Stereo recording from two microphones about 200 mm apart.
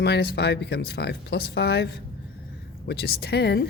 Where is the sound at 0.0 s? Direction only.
55° left (ahead or behind).